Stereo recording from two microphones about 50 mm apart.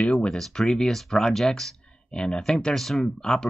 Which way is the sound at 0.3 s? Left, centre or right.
Centre.